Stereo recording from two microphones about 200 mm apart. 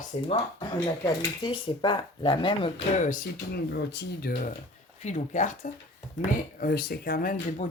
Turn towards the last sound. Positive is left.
turn(degrees=45)  # may be behind; listen again after turning